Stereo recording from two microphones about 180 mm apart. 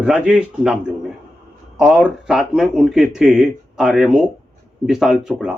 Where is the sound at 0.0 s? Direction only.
5° right (ahead or behind).